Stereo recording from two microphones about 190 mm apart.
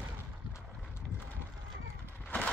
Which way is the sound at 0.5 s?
10° left (ahead or behind).